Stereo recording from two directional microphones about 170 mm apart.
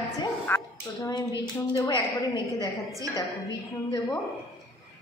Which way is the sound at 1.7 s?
20° left (ahead or behind).